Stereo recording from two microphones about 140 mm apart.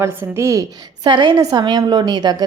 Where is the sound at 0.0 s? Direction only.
15° right (ahead or behind).